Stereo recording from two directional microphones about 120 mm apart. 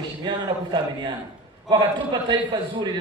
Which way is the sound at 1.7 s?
40° right (ahead or behind).